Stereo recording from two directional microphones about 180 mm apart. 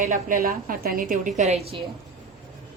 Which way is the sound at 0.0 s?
45° right (ahead or behind).